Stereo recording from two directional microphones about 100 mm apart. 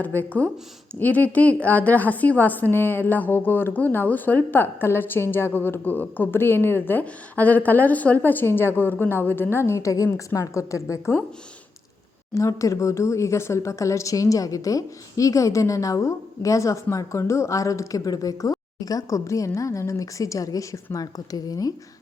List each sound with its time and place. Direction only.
0.0 s a woman's voice: 15° left (ahead or behind)
12.3 s speech: 30° left (ahead or behind)